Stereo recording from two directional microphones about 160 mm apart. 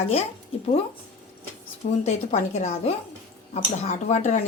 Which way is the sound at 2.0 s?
45° left (ahead or behind).